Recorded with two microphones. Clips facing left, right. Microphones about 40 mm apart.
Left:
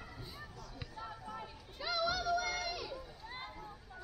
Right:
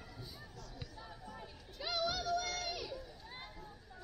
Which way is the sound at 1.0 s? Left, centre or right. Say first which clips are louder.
Left 8 dB; left.